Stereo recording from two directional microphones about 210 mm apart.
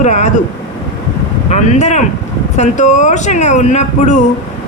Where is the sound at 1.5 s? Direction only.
35° left (ahead or behind).